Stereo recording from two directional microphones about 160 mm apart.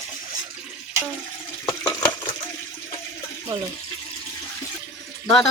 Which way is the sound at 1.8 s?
25° left (ahead or behind).